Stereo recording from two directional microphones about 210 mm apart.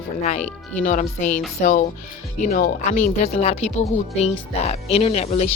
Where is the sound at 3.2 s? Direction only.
30° left (ahead or behind).